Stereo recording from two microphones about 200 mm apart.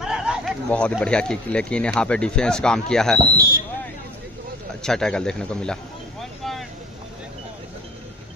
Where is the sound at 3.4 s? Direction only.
45° left (ahead or behind).